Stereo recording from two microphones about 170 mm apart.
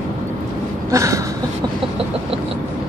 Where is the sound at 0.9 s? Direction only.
20° right (ahead or behind).